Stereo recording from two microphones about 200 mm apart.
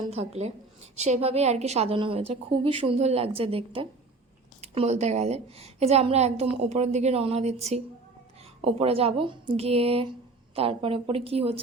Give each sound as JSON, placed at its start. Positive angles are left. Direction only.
{"t": 0.9, "sound": "a woman's voice", "side_deg": -35}